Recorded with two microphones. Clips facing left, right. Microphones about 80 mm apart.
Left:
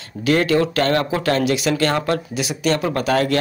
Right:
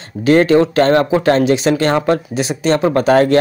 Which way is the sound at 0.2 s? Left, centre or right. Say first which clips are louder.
Right 6 dB; right.